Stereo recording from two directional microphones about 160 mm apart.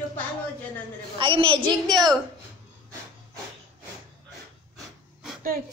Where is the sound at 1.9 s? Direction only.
Centre (ahead or behind).